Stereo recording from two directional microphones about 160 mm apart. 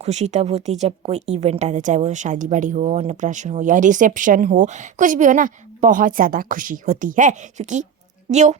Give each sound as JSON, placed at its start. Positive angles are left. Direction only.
{"t": 0.0, "sound": "speech", "side_deg": -45}